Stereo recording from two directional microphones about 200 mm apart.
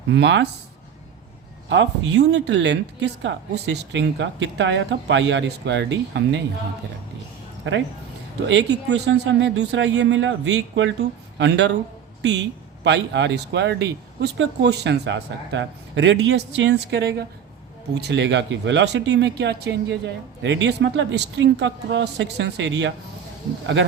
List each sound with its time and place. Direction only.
0.1 s speech: 65° right (ahead or behind)
1.7 s speech: 65° right (ahead or behind)
8.4 s speech: 65° right (ahead or behind)